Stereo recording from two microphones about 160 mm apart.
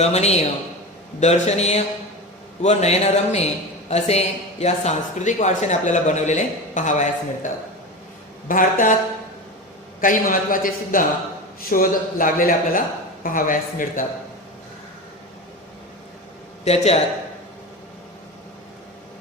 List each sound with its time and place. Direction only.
0.0 s a man's voice: 45° left (ahead or behind)
10.0 s speech: 55° left (ahead or behind)
16.6 s a man's voice: 40° left (ahead or behind)